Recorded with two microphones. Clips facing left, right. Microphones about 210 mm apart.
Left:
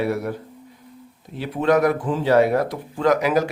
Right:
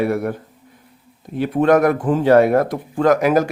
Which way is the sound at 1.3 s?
50° right (ahead or behind).